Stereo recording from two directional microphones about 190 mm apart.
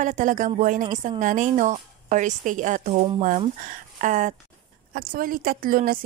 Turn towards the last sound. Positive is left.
turn(degrees=-50)  # may be behind; listen again after turning